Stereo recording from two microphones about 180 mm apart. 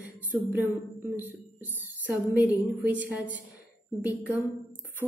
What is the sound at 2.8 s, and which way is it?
A woman's voice, 10° right (ahead or behind).